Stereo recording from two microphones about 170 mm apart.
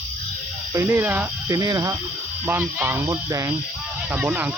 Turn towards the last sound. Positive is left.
turn(degrees=-10)  # may be behind; listen again after turning